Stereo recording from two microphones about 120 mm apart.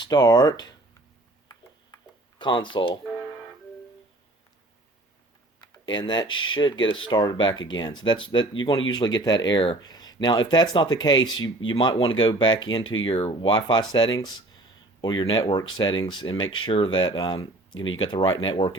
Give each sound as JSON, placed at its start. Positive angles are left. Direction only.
{"t": 0.0, "sound": "speech", "side_deg": 35}
{"t": 2.4, "sound": "speech", "side_deg": 40}
{"t": 5.9, "sound": "speech", "side_deg": 40}